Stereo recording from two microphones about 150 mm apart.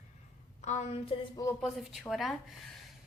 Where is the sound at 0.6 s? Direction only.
50° left (ahead or behind).